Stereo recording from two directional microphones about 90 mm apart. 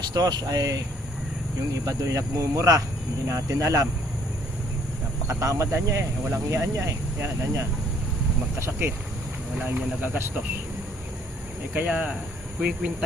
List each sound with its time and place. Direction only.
0.1 s speech: 50° right (ahead or behind)
1.8 s speech: 40° right (ahead or behind)
5.3 s speech: 35° right (ahead or behind)
9.6 s speech: 20° right (ahead or behind)
11.7 s speech: 15° right (ahead or behind)